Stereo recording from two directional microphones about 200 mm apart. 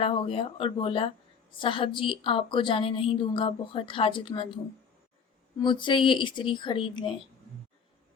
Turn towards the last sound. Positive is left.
turn(degrees=25)  # may be behind; listen again after turning